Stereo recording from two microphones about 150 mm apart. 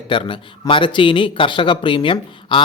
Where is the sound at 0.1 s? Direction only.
35° left (ahead or behind).